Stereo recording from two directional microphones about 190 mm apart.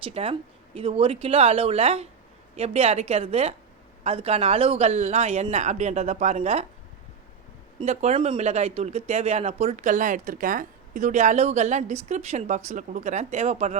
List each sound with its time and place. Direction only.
0.0 s a man's voice: 30° right (ahead or behind)
7.8 s a man's voice: 30° right (ahead or behind)